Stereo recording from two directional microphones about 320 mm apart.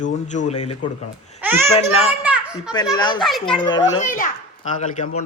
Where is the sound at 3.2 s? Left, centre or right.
Centre.